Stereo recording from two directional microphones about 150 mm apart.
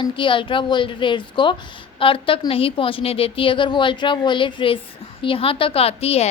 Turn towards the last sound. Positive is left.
turn(degrees=40)  # may be behind; listen again after turning